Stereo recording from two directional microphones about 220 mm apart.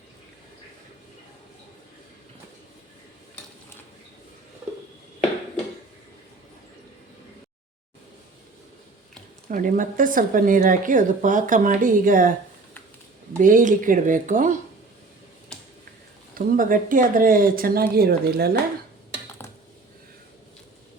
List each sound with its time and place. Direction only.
9.5 s speech: 40° right (ahead or behind)
13.4 s speech: 35° right (ahead or behind)
16.3 s speech: 40° right (ahead or behind)